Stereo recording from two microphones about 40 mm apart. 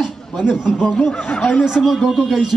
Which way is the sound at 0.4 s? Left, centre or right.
Centre.